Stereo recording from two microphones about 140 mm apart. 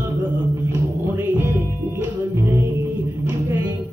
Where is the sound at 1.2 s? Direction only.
15° right (ahead or behind).